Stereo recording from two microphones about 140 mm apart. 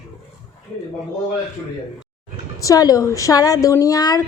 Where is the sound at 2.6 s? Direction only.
25° left (ahead or behind).